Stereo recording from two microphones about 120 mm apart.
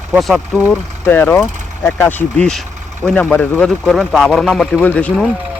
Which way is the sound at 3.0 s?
5° left (ahead or behind).